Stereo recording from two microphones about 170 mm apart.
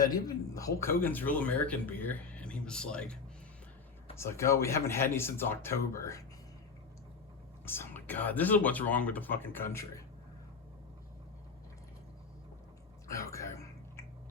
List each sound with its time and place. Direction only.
0.0 s speech: 20° left (ahead or behind); by 3.2 s 5° left (ahead or behind)
4.2 s speech: 15° left (ahead or behind)
7.6 s speech: 15° left (ahead or behind)
13.1 s a sound: 20° left (ahead or behind)